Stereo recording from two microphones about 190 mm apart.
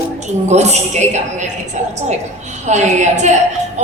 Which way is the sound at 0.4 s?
35° right (ahead or behind).